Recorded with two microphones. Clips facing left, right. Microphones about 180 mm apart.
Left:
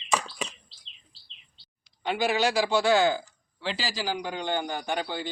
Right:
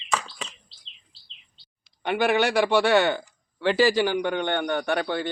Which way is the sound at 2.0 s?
60° right (ahead or behind).